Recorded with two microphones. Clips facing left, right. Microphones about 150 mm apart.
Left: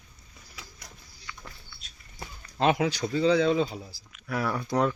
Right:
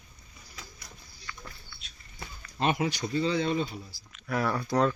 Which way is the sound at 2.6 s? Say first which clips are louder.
Left 4 dB; 90° left.